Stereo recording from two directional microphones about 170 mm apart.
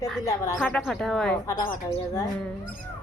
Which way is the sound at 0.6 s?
5° left (ahead or behind).